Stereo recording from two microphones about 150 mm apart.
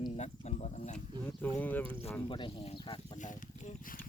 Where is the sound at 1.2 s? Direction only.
10° left (ahead or behind).